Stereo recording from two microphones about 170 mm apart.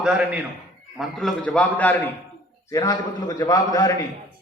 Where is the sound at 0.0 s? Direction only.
5° right (ahead or behind).